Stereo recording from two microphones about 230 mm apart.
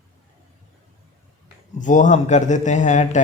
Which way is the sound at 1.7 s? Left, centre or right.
Left.